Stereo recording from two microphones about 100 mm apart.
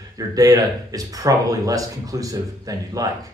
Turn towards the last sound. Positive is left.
turn(degrees=-35)  # may be behind; listen again after turning